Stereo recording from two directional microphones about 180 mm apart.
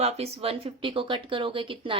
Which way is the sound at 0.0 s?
35° right (ahead or behind).